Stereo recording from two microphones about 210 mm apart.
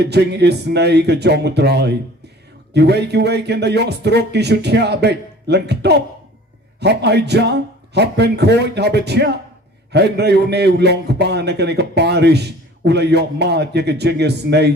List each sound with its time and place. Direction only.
0.0 s a man's voice: 55° right (ahead or behind)